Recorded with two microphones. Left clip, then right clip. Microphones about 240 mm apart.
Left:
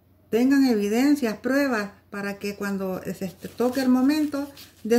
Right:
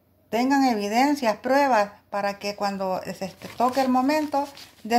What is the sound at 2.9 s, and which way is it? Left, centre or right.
Speech, centre.